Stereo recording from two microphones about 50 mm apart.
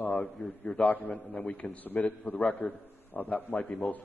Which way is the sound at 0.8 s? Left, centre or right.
Left.